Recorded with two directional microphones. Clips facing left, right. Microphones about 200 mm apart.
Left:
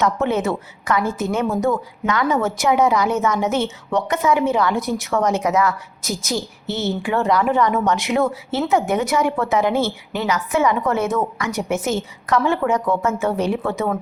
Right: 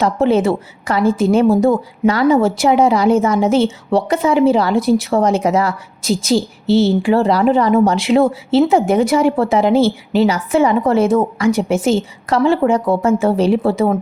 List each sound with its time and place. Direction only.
0.0 s a woman's voice: 30° right (ahead or behind)